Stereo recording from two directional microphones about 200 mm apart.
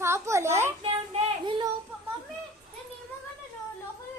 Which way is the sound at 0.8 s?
30° right (ahead or behind).